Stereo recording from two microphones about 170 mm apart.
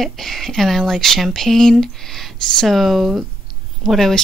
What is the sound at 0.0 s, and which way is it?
Speech, centre (ahead or behind).